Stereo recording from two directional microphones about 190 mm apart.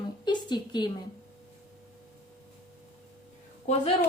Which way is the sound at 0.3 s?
25° left (ahead or behind).